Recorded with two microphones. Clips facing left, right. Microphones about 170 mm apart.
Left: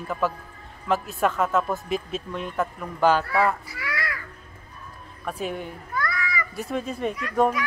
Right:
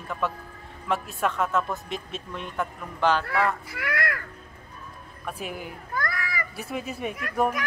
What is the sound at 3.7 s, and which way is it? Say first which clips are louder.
Caw: right 3 dB; 55° right (ahead or behind).